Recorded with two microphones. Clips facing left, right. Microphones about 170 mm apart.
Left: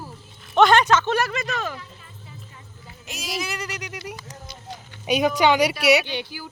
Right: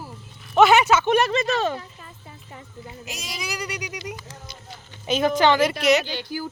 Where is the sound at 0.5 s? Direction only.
5° right (ahead or behind); by 1.8 s 30° right (ahead or behind).